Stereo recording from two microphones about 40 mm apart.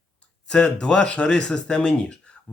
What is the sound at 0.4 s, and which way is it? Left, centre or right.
Speech, left.